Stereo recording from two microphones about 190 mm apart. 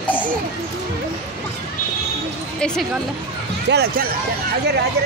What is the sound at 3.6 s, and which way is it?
Speech, 60° right (ahead or behind).